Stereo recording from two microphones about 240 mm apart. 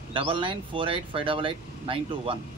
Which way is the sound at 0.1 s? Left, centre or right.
Right.